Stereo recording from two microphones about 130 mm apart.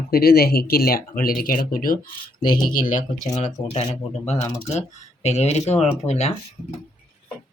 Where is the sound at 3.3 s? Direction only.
60° left (ahead or behind).